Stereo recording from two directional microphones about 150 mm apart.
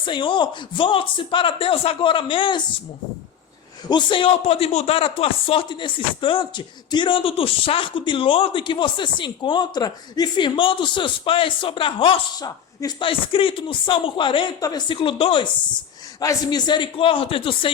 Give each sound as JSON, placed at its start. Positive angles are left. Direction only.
{"t": 0.0, "sound": "a man's voice", "side_deg": 35}
{"t": 3.8, "sound": "a man's voice", "side_deg": 30}
{"t": 13.1, "sound": "a man's voice", "side_deg": 35}
{"t": 16.2, "sound": "a man's voice", "side_deg": 25}